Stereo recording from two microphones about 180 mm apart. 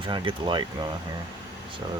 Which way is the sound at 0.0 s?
25° right (ahead or behind).